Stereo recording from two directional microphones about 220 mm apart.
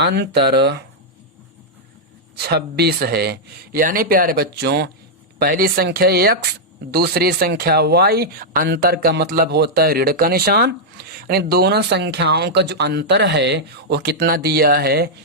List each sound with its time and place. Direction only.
0.0 s speech: 50° right (ahead or behind)
2.3 s speech: 45° right (ahead or behind)